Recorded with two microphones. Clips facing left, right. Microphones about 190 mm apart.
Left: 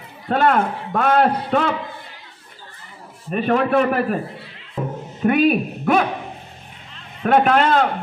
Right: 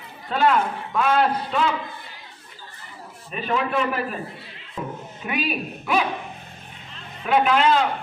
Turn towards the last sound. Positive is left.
turn(degrees=50)  # may be behind; listen again after turning